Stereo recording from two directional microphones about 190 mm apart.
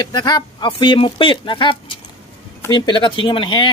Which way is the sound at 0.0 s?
20° left (ahead or behind).